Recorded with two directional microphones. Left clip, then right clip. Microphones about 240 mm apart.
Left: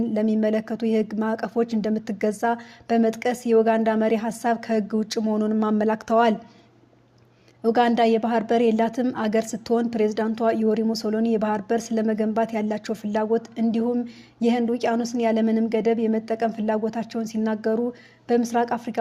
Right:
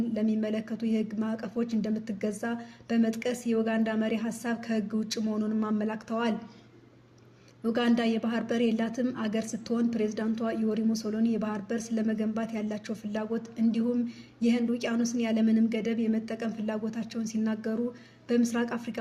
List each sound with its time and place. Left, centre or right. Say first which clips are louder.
0.1 s a woman's voice: left 8 dB; left
7.6 s a woman's voice: left 9 dB; left